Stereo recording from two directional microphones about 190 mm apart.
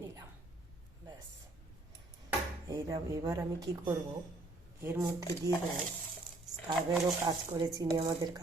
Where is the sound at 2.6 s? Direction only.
20° right (ahead or behind).